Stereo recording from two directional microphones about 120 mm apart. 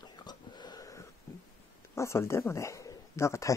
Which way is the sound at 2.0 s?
20° left (ahead or behind).